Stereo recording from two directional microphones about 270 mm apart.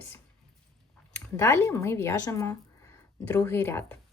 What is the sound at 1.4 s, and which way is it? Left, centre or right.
A woman's voice, centre.